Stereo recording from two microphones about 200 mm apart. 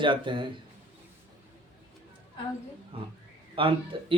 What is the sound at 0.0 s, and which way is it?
Speech, 25° right (ahead or behind).